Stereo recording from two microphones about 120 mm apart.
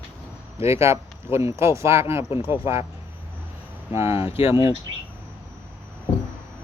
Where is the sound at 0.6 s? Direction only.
25° right (ahead or behind).